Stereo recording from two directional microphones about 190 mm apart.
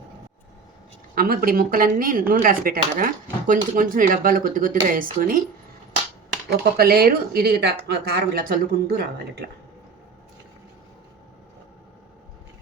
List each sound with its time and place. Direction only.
1.1 s speech: 50° right (ahead or behind)
6.5 s speech: 55° right (ahead or behind)